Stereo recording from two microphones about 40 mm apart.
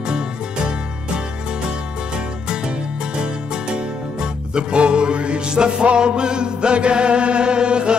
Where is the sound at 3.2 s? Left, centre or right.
Right.